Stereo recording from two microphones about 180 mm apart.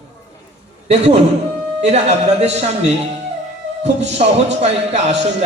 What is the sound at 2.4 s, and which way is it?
A man's voice, 35° right (ahead or behind).